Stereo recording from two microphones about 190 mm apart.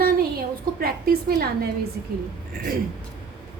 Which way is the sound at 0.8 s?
55° right (ahead or behind).